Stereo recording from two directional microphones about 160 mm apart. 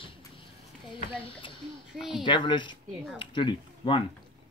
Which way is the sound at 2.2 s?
30° left (ahead or behind).